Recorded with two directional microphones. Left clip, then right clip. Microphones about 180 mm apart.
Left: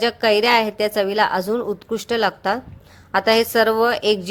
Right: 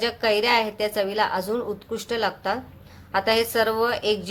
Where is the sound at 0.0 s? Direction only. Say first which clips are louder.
Left 5 dB; 40° left (ahead or behind).